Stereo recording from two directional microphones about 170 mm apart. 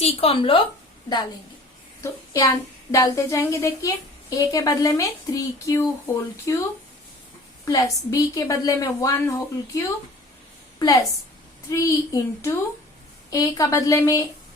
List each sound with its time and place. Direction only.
0.0 s a woman's voice: 35° left (ahead or behind)
2.0 s a woman's voice: 20° left (ahead or behind)